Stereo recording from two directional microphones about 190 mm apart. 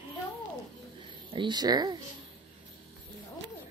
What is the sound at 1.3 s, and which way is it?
Speech, 25° right (ahead or behind).